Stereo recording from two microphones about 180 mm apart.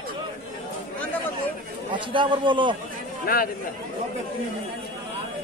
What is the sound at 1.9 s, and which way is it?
Speech, 25° right (ahead or behind).